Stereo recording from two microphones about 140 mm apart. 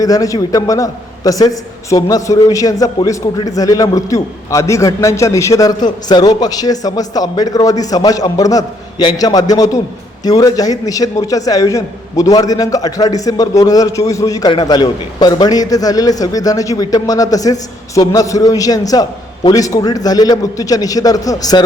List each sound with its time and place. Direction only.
0.0 s a man's voice: 25° left (ahead or behind)